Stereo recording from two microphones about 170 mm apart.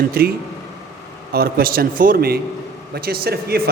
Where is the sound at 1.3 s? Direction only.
60° right (ahead or behind).